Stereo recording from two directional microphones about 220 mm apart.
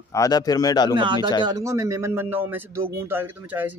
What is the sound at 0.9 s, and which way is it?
Speech, 20° right (ahead or behind).